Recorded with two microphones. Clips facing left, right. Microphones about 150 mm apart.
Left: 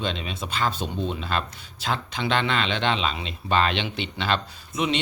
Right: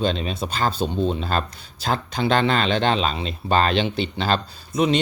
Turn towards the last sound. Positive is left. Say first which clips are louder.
# right 6 dB
turn(degrees=-40)  # may be behind; listen again after turning